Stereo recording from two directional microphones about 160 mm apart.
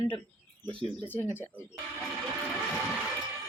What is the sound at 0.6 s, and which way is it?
Speech, 30° right (ahead or behind).